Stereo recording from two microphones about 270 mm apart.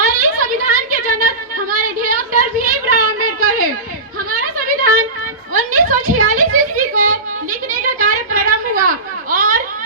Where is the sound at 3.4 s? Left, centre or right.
Right.